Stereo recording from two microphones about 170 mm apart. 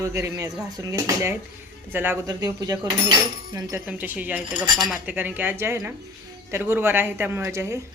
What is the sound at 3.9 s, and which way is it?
A woman's voice, 10° right (ahead or behind).